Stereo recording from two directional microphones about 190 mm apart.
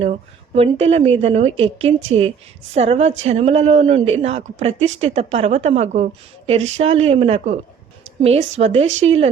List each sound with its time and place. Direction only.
0.0 s a woman's voice: 35° right (ahead or behind)